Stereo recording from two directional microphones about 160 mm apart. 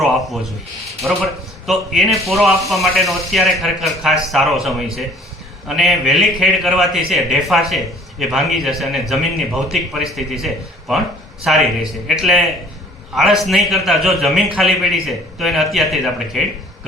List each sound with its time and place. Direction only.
1.0 s a man's voice: centre (ahead or behind)